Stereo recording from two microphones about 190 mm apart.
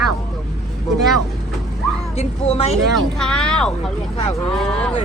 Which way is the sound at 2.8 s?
Centre (ahead or behind).